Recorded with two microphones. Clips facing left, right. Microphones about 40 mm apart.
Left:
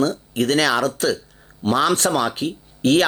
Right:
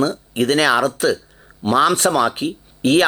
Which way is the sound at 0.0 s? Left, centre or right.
Right.